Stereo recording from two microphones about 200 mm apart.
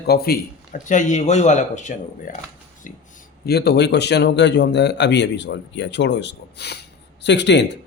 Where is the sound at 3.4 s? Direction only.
55° left (ahead or behind).